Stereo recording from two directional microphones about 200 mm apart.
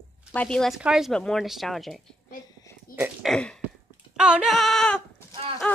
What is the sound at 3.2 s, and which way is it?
Speech, 5° left (ahead or behind).